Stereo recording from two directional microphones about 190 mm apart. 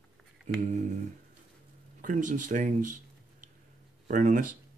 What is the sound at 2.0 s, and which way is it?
Speech, 45° right (ahead or behind).